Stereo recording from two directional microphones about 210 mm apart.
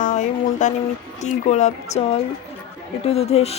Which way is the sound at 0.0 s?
35° left (ahead or behind).